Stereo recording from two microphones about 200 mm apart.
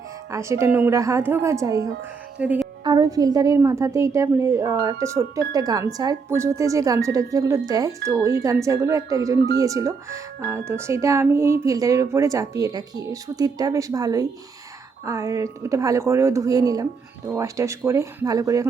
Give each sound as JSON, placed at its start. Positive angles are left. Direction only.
{"t": 0.3, "sound": "a woman's voice", "side_deg": -15}
{"t": 2.8, "sound": "a woman's voice", "side_deg": -20}